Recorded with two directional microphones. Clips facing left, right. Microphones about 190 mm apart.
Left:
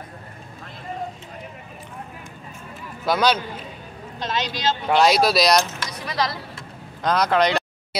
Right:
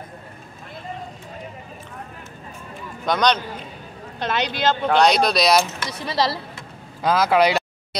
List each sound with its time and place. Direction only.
3.1 s speech: 5° left (ahead or behind)
4.2 s speech: 60° right (ahead or behind)
4.8 s speech: 5° left (ahead or behind)
5.9 s speech: 30° right (ahead or behind)
7.0 s speech: 5° right (ahead or behind)
7.9 s a sound: 5° left (ahead or behind)